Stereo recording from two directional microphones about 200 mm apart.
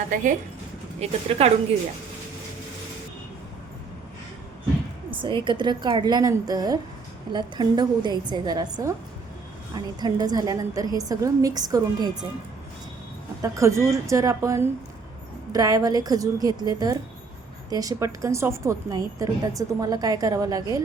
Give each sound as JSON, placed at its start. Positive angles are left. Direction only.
{"t": 0.9, "sound": "speech", "side_deg": -30}
{"t": 5.1, "sound": "a woman's voice", "side_deg": -25}
{"t": 13.4, "sound": "a woman's voice", "side_deg": -15}